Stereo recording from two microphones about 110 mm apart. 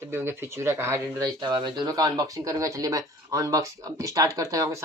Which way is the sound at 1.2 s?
45° right (ahead or behind).